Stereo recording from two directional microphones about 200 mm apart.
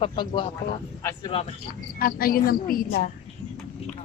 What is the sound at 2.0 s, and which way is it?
Speech, 45° left (ahead or behind).